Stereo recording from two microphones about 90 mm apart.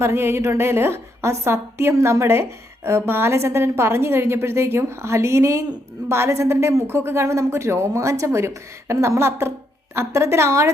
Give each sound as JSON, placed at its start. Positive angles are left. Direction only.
{"t": 0.0, "sound": "a woman's voice", "side_deg": -25}